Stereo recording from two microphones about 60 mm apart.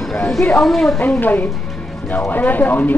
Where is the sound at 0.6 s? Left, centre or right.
Centre.